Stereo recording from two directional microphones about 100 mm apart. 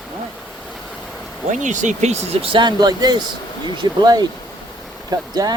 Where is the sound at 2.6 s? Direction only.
45° right (ahead or behind).